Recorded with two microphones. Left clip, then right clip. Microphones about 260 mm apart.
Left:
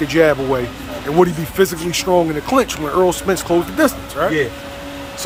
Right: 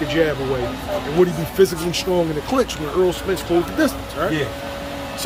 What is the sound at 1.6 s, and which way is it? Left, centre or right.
A man's voice, centre.